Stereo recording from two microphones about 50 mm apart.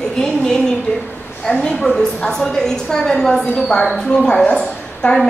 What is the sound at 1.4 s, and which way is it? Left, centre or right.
A woman's voice, centre.